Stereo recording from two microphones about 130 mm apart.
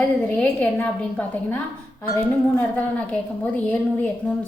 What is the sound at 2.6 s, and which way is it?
A woman's voice, 10° left (ahead or behind).